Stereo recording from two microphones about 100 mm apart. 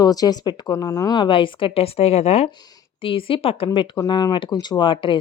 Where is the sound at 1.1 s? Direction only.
55° left (ahead or behind); by 2.5 s 90° left.